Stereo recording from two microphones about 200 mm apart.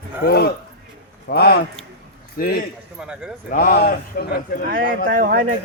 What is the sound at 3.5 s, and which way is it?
Speech, 50° left (ahead or behind).